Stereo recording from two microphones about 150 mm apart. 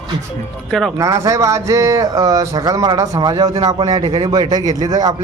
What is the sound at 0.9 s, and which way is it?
Speech, 20° right (ahead or behind).